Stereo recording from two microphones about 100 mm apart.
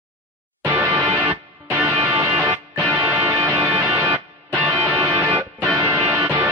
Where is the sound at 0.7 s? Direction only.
15° right (ahead or behind).